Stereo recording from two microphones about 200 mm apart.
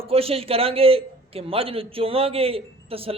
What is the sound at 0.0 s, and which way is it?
A man's voice, 30° right (ahead or behind).